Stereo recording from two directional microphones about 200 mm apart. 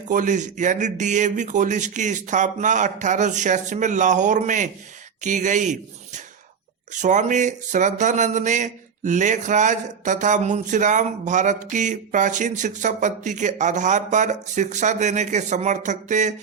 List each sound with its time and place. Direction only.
0.1 s speech: 40° right (ahead or behind)